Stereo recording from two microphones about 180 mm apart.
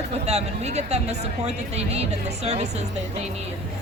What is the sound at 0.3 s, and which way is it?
A woman's voice, 35° right (ahead or behind).